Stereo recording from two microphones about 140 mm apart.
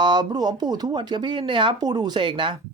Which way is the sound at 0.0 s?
30° right (ahead or behind).